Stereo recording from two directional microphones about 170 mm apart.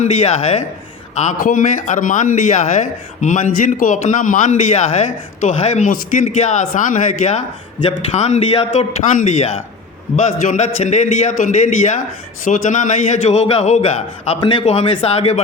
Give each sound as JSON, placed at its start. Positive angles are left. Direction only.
{"t": 0.0, "sound": "a man's voice", "side_deg": 40}